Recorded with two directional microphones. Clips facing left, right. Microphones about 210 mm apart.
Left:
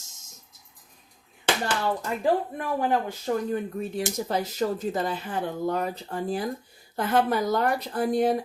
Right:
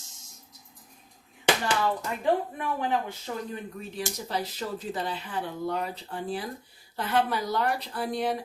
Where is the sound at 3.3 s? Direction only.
50° left (ahead or behind).